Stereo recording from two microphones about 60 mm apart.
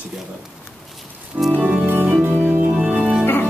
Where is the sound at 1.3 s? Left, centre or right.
Centre.